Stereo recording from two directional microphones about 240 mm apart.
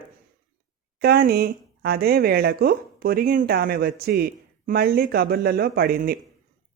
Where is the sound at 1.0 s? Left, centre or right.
Right.